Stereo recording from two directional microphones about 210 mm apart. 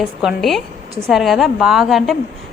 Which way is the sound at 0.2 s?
Centre (ahead or behind).